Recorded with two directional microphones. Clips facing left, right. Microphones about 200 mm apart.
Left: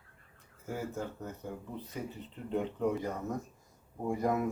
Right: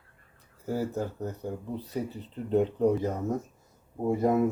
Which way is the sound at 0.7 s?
35° right (ahead or behind).